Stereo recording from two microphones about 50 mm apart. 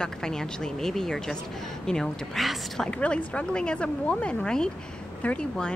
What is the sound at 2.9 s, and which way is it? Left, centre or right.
Speech, left.